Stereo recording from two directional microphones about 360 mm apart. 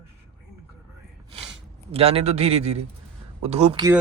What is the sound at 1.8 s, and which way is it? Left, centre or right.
Speech, centre.